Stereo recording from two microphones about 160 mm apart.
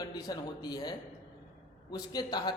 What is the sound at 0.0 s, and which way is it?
A man's voice, 25° left (ahead or behind).